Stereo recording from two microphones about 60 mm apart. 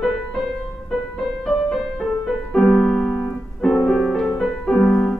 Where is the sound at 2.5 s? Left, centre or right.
Centre.